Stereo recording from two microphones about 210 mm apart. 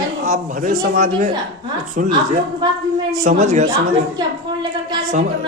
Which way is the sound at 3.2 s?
35° right (ahead or behind).